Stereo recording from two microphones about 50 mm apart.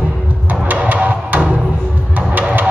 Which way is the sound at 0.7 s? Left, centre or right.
Right.